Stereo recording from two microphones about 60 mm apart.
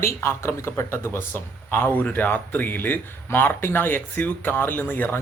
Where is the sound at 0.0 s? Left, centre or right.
Left.